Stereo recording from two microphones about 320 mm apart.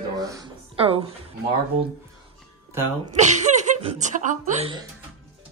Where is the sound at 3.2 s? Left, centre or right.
Right.